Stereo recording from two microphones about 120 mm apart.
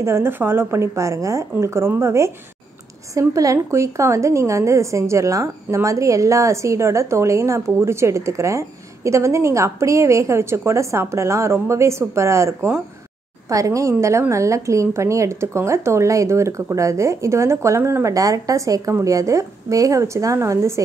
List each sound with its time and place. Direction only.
0.0 s a woman's voice: 20° right (ahead or behind)